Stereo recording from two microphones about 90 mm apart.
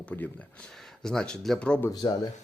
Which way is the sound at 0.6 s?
5° left (ahead or behind).